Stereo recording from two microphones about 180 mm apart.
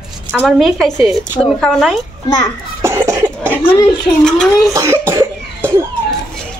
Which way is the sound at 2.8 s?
15° right (ahead or behind).